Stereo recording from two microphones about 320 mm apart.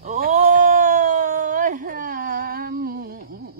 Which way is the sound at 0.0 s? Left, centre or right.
Right.